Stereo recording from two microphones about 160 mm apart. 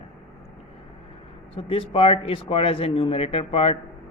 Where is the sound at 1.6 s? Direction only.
35° left (ahead or behind).